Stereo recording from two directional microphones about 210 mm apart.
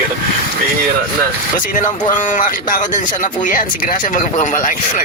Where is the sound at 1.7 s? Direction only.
40° left (ahead or behind).